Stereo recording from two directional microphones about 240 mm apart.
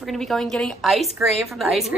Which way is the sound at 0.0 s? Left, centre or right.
Centre.